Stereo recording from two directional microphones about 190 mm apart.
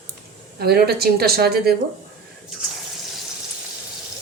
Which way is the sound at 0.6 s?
55° right (ahead or behind).